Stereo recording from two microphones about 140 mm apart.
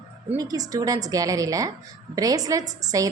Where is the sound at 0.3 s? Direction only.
25° right (ahead or behind).